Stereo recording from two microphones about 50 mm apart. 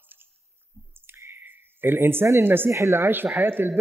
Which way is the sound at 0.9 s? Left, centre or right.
Right.